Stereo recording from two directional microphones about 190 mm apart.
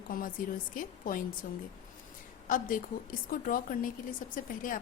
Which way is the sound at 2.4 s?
45° left (ahead or behind).